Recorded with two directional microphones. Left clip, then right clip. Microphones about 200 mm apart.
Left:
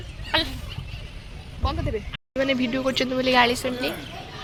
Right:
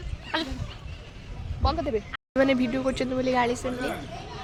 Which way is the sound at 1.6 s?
45° right (ahead or behind).